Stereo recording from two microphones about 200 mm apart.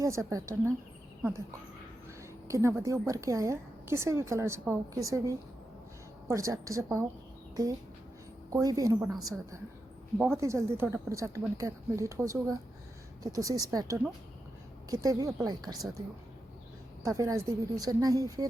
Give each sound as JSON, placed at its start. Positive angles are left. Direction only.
{"t": 0.0, "sound": "a woman's voice", "side_deg": -15}
{"t": 2.5, "sound": "a woman's voice", "side_deg": -15}
{"t": 8.6, "sound": "a woman's voice", "side_deg": -15}